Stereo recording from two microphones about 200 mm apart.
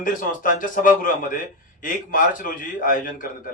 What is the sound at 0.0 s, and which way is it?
A man's voice, 45° left (ahead or behind).